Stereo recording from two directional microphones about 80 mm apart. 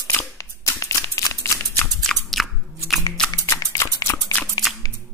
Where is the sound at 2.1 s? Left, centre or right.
Centre.